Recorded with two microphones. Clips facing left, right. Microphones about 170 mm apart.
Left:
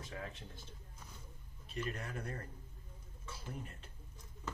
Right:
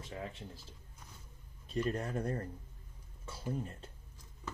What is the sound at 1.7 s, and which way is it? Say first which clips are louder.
Speech: right 7 dB; 35° right (ahead or behind).